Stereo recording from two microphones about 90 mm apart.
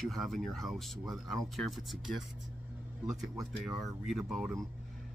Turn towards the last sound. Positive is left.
turn(degrees=-5)  # may be behind; listen again after turning